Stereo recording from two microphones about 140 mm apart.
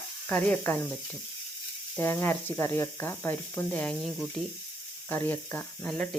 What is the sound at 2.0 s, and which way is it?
Speech, 15° left (ahead or behind).